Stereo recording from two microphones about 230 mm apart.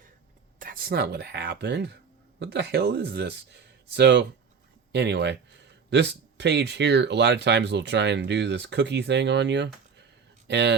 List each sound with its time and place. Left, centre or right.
0.6 s speech: right